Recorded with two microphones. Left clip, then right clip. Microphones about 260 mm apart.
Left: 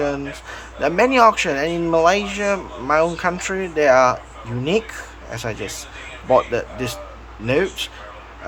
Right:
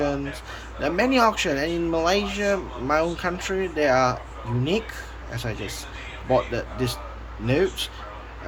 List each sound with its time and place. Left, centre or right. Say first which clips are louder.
0.0 s speech: left 3 dB; centre